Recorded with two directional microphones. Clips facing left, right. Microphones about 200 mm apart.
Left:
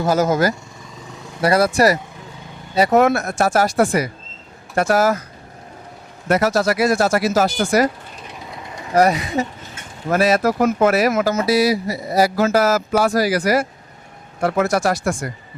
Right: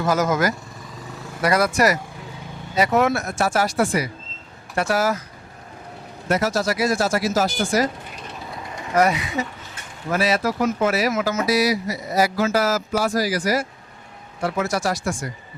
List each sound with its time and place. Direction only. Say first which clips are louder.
0.0 s speech: left 3 dB; 30° left (ahead or behind)
3.0 s speech: left 4 dB; 50° left (ahead or behind)
6.2 s speech: left 4 dB; 60° left (ahead or behind)
8.8 s speech: left 3 dB; 35° left (ahead or behind); by 11.3 s 55° left (ahead or behind)
11.3 s mantra: left 3 dB; 30° left (ahead or behind)
12.4 s speech: left 4 dB; 50° left (ahead or behind)